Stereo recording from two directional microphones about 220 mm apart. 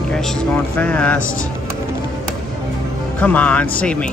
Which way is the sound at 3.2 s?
5° left (ahead or behind).